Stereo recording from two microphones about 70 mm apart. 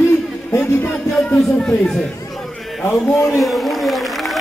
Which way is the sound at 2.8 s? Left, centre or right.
Left.